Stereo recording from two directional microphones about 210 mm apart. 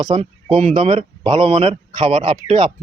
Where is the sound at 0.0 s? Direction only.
25° right (ahead or behind).